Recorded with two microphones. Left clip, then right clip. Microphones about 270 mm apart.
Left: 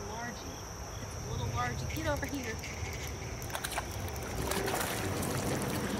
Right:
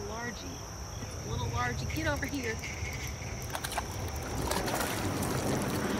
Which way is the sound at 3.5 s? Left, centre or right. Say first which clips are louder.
Right 1 dB; centre.